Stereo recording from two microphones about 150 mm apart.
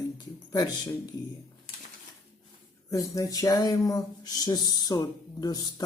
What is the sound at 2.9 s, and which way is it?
Speech, 20° left (ahead or behind).